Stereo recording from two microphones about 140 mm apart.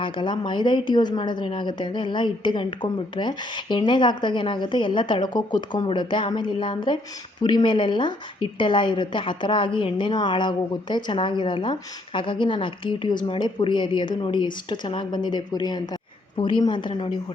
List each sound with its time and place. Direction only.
0.0 s a woman's voice: 35° left (ahead or behind)